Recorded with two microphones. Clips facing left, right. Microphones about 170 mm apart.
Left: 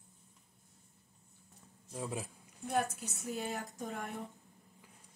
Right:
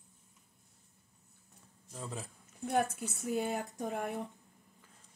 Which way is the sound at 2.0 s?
10° left (ahead or behind).